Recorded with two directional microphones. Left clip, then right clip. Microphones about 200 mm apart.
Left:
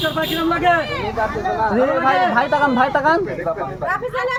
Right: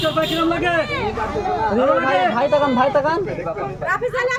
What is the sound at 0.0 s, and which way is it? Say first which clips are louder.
Speech: right 1 dB; 10° left (ahead or behind).